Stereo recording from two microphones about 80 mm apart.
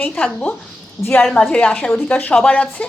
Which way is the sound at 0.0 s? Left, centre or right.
Centre.